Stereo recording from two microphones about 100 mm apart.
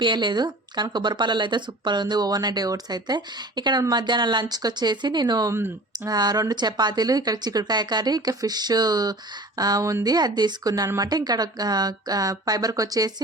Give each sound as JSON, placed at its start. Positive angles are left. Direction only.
{"t": 0.0, "sound": "speech", "side_deg": -50}